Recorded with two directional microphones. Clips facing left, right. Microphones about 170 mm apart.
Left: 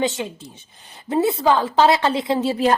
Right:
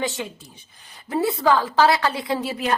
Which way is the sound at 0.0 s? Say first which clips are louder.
Left 4 dB; 20° left (ahead or behind).